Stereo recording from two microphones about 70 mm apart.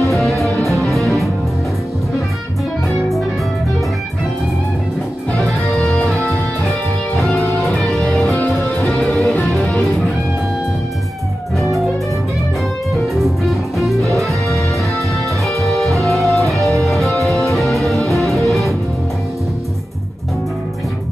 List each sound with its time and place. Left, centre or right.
0.0 s music: centre
5.8 s music: centre
7.2 s music: centre
8.4 s music: left
9.7 s music: centre
12.9 s music: centre